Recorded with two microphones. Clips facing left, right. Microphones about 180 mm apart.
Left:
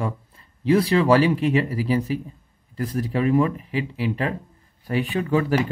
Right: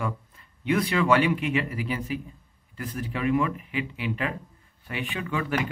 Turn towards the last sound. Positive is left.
turn(degrees=35)  # may be behind; listen again after turning